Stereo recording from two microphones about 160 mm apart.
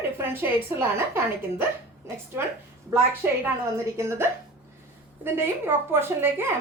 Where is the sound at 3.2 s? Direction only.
15° right (ahead or behind).